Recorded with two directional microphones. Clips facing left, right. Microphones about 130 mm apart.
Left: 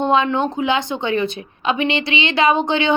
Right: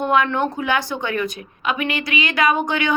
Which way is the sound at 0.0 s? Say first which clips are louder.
Left 2 dB; 25° left (ahead or behind).